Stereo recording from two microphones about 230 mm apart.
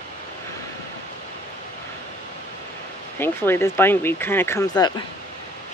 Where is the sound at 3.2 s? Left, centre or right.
Centre.